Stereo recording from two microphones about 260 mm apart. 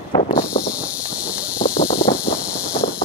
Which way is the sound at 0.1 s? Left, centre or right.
Centre.